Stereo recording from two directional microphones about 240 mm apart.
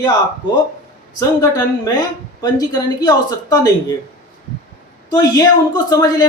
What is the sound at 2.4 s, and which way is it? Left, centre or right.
A woman's voice, centre.